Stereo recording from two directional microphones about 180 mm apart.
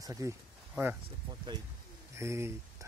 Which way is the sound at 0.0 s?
20° right (ahead or behind).